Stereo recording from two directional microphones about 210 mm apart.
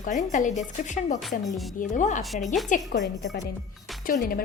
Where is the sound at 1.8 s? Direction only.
35° left (ahead or behind).